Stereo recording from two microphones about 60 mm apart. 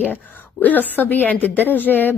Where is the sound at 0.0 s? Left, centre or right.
Left.